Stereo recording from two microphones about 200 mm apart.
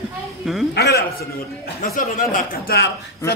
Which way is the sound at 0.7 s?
55° left (ahead or behind).